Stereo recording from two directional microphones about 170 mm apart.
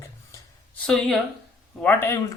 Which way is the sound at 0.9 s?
Centre (ahead or behind).